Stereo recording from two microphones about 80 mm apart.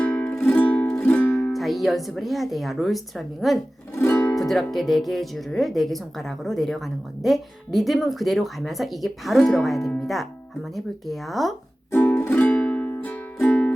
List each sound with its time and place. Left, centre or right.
0.0 s music: centre
1.5 s speech: centre
11.9 s music: left